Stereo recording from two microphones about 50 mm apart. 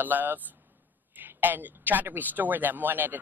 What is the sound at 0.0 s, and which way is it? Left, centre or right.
Speech, right.